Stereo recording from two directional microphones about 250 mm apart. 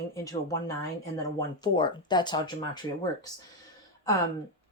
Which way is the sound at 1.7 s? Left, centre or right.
Centre.